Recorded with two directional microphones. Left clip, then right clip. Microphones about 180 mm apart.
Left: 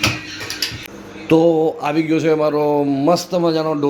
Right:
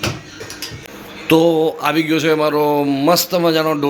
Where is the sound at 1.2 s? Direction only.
5° left (ahead or behind).